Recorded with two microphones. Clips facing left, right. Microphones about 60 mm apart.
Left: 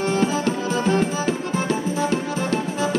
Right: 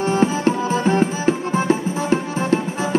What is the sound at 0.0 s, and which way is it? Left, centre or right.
Music, right.